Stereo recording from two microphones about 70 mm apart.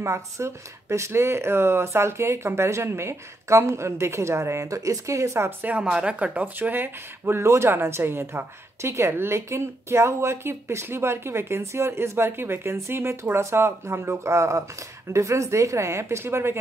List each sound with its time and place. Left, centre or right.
0.0 s speech: right
5.6 s a woman's voice: right